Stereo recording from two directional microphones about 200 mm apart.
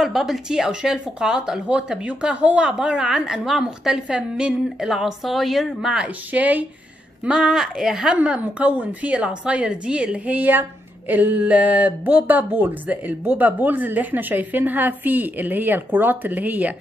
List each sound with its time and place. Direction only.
0.0 s speech: centre (ahead or behind)